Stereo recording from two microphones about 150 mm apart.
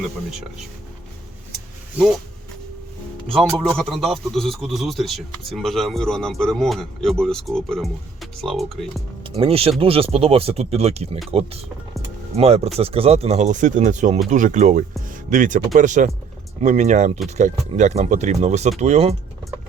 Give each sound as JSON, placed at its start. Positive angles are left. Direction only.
{"t": 1.5, "sound": "a sound", "side_deg": 0}
{"t": 3.3, "sound": "a man's voice", "side_deg": 0}
{"t": 9.2, "sound": "speech", "side_deg": -40}